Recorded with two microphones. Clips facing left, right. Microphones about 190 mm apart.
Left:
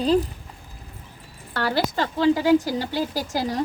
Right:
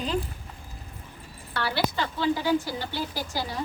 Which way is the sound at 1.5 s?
45° left (ahead or behind).